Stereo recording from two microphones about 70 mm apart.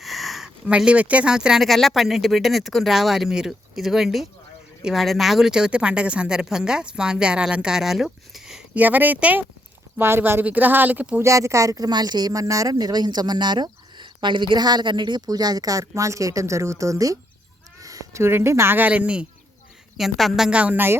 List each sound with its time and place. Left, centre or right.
0.0 s a sound: centre
0.8 s speech: centre
1.6 s speech: centre
8.7 s speech: right
10.4 s speech: right
11.2 s speech: right
11.9 s speech: right
17.7 s a sound: right
18.2 s speech: right
18.9 s speech: centre
20.0 s speech: centre
20.6 s speech: right